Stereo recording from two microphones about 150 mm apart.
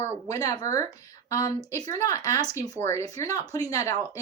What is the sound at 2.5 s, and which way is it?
Speech, 20° right (ahead or behind).